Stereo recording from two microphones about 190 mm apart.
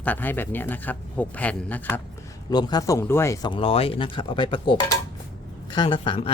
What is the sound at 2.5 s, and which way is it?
Speech, 20° left (ahead or behind).